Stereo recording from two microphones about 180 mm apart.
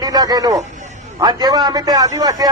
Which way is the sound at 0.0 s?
20° right (ahead or behind).